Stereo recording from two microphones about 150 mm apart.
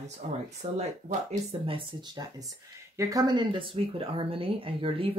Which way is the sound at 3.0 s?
25° right (ahead or behind).